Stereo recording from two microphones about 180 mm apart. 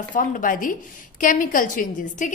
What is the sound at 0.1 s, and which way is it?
A woman's voice, 45° left (ahead or behind).